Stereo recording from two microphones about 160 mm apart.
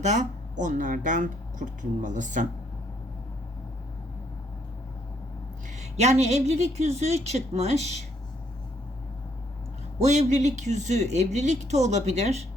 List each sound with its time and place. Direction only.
0.0 s speech: 45° right (ahead or behind)
5.7 s speech: 45° right (ahead or behind)
10.0 s speech: 45° right (ahead or behind)